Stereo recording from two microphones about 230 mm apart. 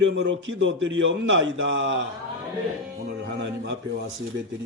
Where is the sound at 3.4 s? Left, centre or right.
Right.